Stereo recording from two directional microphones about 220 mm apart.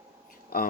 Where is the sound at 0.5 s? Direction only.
40° left (ahead or behind).